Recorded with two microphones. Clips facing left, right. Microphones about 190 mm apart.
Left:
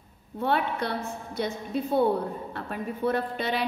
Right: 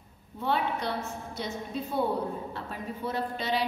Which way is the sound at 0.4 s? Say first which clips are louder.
Left 3 dB; 60° left (ahead or behind).